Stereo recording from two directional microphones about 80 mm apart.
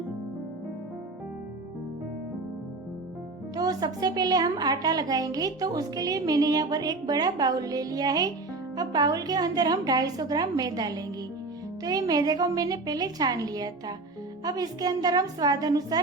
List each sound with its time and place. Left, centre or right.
3.5 s a woman's voice: right